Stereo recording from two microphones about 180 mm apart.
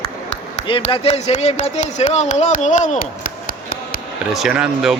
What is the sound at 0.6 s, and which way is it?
Speech, 30° left (ahead or behind).